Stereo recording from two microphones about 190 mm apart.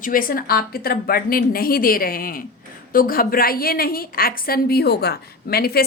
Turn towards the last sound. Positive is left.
turn(degrees=55)  # may be behind; listen again after turning